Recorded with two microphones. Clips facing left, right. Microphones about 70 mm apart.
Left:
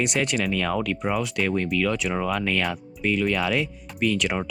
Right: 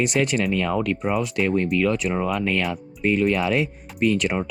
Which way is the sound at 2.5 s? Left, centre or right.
Centre.